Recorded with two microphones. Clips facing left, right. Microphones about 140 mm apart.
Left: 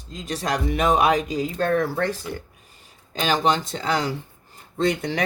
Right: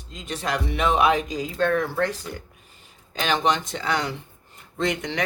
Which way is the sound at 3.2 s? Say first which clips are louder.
Left 2 dB; 35° left (ahead or behind).